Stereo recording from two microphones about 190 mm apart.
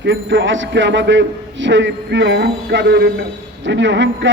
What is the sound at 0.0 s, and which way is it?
A man's voice, 70° right (ahead or behind).